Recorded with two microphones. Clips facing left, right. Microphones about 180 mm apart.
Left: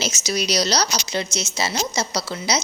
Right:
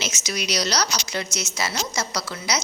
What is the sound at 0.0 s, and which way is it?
A woman's voice, 35° left (ahead or behind).